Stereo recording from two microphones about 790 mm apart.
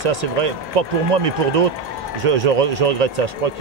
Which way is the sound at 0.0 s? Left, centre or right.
Right.